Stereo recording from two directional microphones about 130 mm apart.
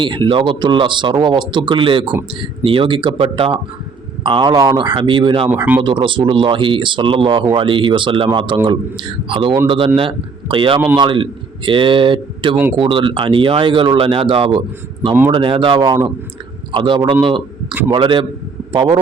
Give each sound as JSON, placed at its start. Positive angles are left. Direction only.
{"t": 0.0, "sound": "speech", "side_deg": -40}